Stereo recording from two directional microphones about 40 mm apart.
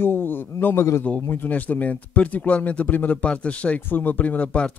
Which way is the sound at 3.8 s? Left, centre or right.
Left.